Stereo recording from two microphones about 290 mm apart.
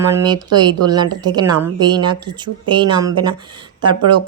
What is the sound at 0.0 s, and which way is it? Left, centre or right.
Speech, centre.